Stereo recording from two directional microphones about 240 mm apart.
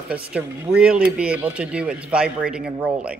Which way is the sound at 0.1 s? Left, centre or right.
Centre.